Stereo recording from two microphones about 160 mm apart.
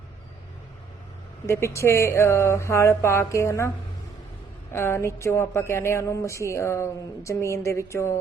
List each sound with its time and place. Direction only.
1.5 s speech: 15° left (ahead or behind)
4.7 s speech: 15° left (ahead or behind)